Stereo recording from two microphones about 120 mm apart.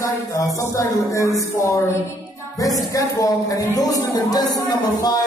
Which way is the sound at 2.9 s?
30° left (ahead or behind).